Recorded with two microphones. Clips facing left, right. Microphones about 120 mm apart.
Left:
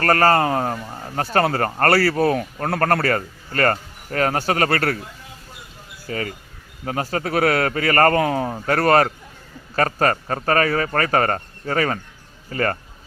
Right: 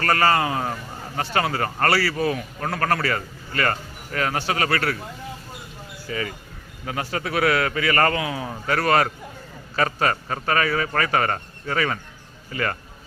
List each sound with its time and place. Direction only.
0.0 s a man's voice: 45° left (ahead or behind)
6.1 s a man's voice: 45° left (ahead or behind)